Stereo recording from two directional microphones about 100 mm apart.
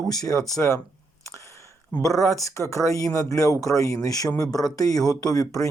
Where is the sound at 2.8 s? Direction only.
35° left (ahead or behind).